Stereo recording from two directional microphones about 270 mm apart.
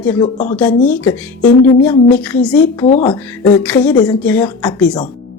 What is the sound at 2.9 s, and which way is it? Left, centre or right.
Speech, left.